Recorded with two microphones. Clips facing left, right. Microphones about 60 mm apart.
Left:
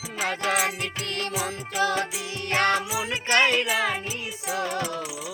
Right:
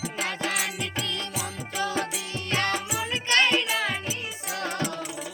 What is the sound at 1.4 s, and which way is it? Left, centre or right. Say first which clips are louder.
Music: left 5 dB; left.